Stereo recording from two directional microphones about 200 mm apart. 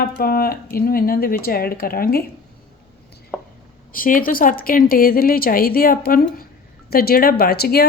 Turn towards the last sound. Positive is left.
turn(degrees=50)  # may be behind; listen again after turning